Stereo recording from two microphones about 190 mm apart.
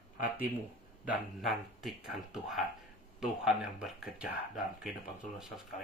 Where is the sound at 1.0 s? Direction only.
Centre (ahead or behind).